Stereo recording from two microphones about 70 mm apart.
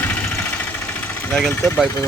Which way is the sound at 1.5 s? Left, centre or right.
Left.